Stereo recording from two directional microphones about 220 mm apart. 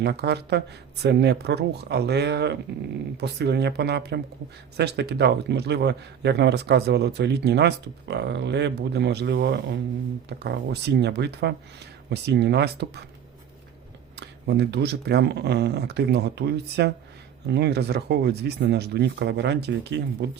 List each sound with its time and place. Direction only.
0.0 s a man's voice: 50° right (ahead or behind)
14.2 s a man's voice: 50° right (ahead or behind)